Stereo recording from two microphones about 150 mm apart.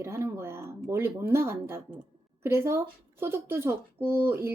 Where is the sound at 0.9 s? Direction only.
15° right (ahead or behind).